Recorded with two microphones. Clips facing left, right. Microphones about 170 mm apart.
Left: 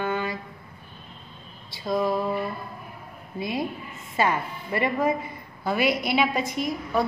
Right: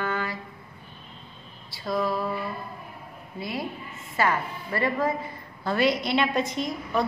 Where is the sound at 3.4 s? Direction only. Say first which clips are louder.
Left 4 dB; 20° left (ahead or behind).